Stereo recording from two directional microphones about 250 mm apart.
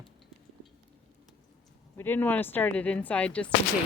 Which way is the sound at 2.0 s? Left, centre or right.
Centre.